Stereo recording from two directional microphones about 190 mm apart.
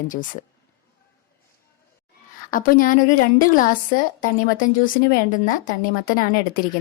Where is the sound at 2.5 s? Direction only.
45° left (ahead or behind).